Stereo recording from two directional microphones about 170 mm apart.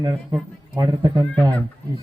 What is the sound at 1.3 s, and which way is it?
Speech, 5° left (ahead or behind).